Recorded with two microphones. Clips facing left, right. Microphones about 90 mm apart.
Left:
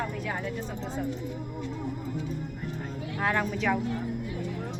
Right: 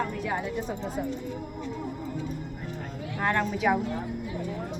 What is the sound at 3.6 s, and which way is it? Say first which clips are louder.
Speech: right 3 dB; 15° right (ahead or behind).